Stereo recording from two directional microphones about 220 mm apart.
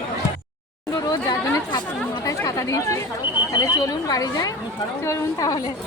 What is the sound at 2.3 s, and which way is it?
Chatter, 15° left (ahead or behind).